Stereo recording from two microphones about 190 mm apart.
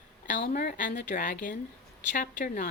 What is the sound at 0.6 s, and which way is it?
A woman's voice, 45° left (ahead or behind).